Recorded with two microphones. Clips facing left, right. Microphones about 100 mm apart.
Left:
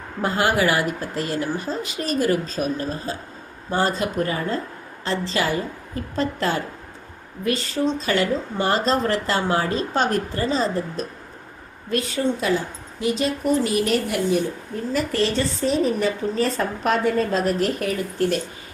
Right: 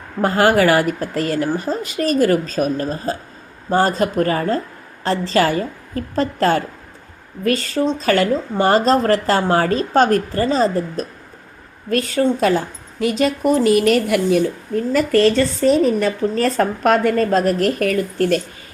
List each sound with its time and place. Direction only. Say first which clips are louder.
0.2 s speech: right 6 dB; 50° right (ahead or behind)
1.6 s speech: right 6 dB; 50° right (ahead or behind)
3.8 s speech: right 5 dB; 50° right (ahead or behind)